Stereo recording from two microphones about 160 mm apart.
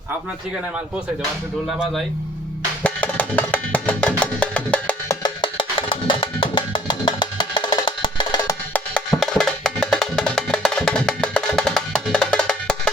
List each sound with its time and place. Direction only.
2.8 s music: 10° left (ahead or behind)
5.2 s music: 30° left (ahead or behind)
8.7 s wood block: 5° left (ahead or behind)